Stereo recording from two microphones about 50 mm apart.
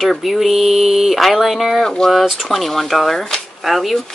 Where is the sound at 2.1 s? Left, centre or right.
Centre.